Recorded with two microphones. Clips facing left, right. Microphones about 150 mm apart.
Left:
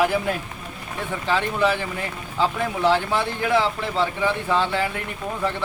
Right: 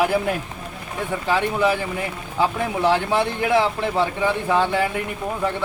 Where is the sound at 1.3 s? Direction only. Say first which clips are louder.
Right 1 dB; 15° right (ahead or behind).